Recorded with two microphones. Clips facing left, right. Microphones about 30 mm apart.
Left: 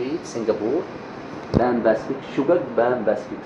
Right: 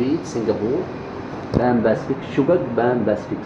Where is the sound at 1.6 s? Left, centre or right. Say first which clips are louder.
Right 1 dB; centre.